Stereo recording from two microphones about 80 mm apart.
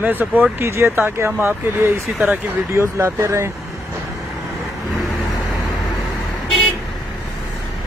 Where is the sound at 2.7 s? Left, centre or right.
Right.